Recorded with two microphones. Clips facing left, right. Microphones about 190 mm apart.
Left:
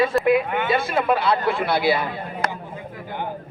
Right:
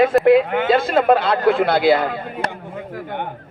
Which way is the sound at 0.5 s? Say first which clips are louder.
Right 5 dB; 50° right (ahead or behind).